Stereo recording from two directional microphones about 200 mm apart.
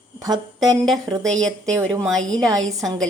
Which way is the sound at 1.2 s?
5° left (ahead or behind).